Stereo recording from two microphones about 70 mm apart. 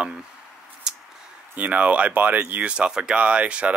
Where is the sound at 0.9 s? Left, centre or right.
Centre.